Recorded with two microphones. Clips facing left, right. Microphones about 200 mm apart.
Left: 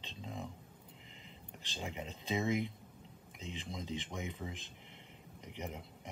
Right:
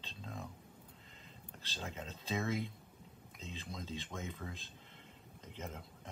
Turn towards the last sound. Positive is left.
turn(degrees=15)  # may be behind; listen again after turning